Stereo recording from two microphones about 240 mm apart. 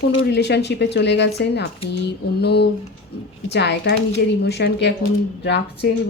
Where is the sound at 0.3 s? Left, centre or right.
Left.